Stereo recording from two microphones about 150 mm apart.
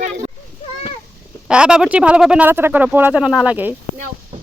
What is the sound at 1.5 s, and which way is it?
Speech, 5° right (ahead or behind).